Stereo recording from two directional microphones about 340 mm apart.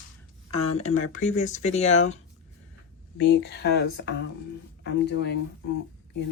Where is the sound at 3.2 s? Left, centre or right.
Left.